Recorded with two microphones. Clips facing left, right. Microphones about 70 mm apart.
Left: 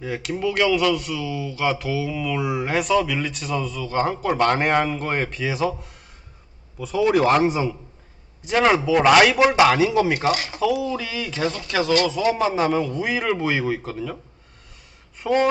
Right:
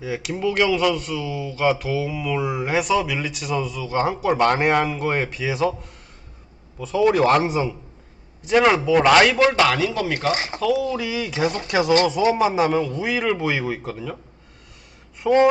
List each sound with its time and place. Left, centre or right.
0.0 s speech: centre
1.2 s speech: centre
2.4 s speech: centre
7.2 s a man's voice: centre; by 10.3 s left
10.3 s speech: right
10.6 s speech: centre
10.9 s speech: centre
12.9 s speech: centre
15.2 s speech: centre